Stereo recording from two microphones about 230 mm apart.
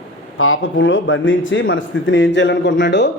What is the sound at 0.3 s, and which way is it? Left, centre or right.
Speech, left.